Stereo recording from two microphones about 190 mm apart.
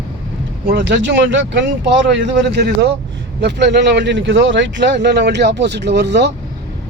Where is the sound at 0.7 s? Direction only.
65° right (ahead or behind).